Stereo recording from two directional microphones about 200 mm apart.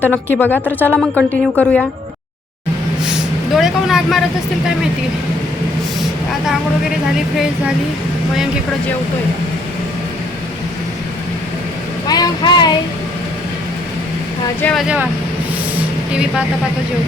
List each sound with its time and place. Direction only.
0.0 s a woman's voice: 10° left (ahead or behind)
3.1 s vehicle: centre (ahead or behind)
12.0 s speech: 20° left (ahead or behind)
14.6 s speech: centre (ahead or behind)